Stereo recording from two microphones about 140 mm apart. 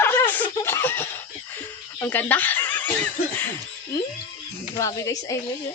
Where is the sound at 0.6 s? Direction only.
15° left (ahead or behind).